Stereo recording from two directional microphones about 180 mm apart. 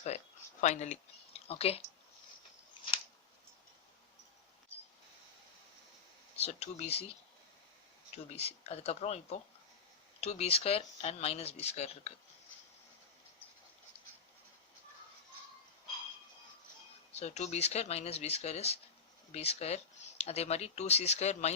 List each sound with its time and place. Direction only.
0.6 s speech: 40° left (ahead or behind)
6.3 s speech: 35° left (ahead or behind)
8.1 s speech: 35° left (ahead or behind)
17.2 s speech: 40° left (ahead or behind)